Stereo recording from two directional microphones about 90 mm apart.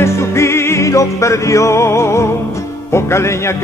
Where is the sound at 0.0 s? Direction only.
30° left (ahead or behind).